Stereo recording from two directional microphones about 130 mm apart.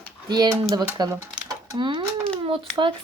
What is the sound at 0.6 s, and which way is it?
Speech, 20° right (ahead or behind).